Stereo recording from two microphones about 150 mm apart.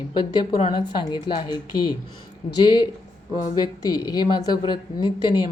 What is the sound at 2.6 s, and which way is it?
A woman's voice, 30° left (ahead or behind).